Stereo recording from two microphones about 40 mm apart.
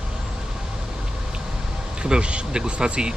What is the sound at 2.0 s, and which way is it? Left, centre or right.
Speech, right.